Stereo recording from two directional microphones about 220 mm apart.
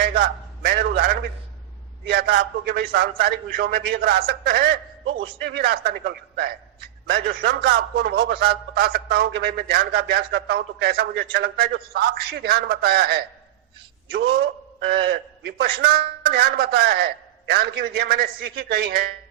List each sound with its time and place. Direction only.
0.0 s a man's voice: 45° right (ahead or behind)
5.0 s a man's voice: 60° right (ahead or behind); by 19.1 s 45° right (ahead or behind)